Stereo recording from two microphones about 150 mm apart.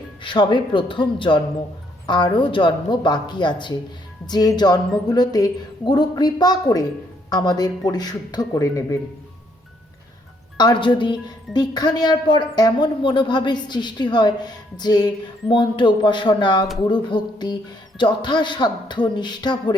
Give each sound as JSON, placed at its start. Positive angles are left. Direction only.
{"t": 0.2, "sound": "a woman's voice", "side_deg": 30}
{"t": 10.6, "sound": "speech", "side_deg": 30}